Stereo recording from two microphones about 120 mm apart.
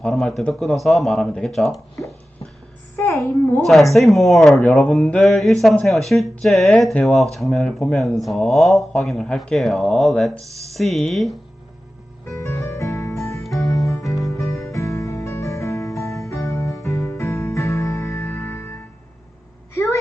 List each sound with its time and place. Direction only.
0.0 s speech: 5° left (ahead or behind)
2.9 s a child's voice: 25° left (ahead or behind)
3.6 s speech: centre (ahead or behind)
12.2 s music: 25° left (ahead or behind)
19.7 s vehicle: 25° left (ahead or behind)